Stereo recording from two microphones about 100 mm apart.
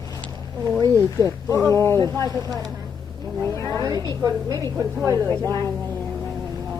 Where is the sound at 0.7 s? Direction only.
35° right (ahead or behind).